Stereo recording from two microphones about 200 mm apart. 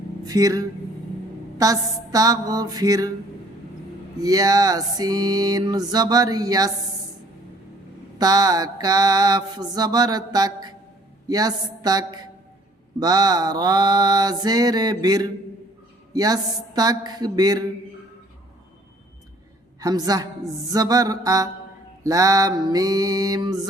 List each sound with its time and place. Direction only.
0.3 s music: 15° right (ahead or behind)
4.2 s music: 20° right (ahead or behind)
8.2 s music: 20° right (ahead or behind)
19.8 s music: 20° right (ahead or behind)